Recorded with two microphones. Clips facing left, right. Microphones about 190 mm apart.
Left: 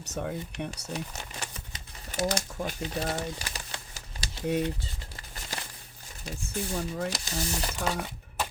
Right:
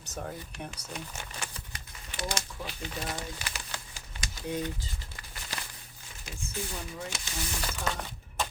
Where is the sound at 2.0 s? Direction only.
45° left (ahead or behind).